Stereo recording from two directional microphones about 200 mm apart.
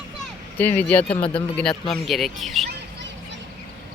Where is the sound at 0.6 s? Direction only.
10° left (ahead or behind).